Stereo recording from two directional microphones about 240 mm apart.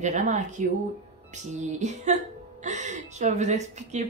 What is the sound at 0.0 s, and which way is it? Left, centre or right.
A woman's voice, right.